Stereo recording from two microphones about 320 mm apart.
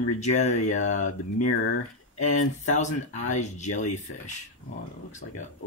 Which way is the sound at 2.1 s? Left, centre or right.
Left.